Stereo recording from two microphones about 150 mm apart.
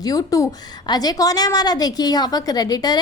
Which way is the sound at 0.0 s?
25° left (ahead or behind).